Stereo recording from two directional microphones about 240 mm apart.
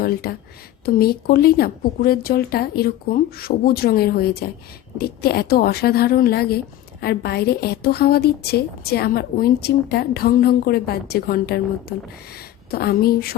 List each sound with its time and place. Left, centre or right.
0.0 s a woman's voice: left